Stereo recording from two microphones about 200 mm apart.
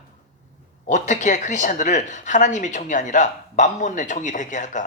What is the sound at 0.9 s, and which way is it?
Speech, 40° left (ahead or behind).